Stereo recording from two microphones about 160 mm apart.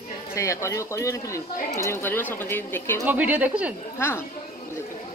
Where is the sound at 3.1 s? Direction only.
10° right (ahead or behind).